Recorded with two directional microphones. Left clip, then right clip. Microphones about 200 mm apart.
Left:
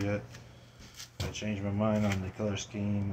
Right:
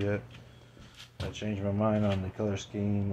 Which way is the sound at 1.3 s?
15° right (ahead or behind).